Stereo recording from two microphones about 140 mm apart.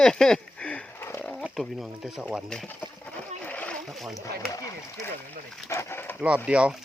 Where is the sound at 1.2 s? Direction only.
Centre (ahead or behind).